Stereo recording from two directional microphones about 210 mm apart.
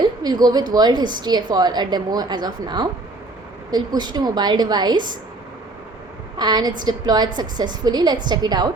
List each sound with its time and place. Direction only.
0.2 s a woman's voice: 20° right (ahead or behind)
6.4 s a woman's voice: 20° right (ahead or behind)